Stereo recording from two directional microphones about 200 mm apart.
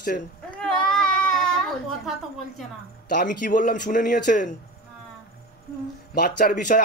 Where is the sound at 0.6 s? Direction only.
5° left (ahead or behind).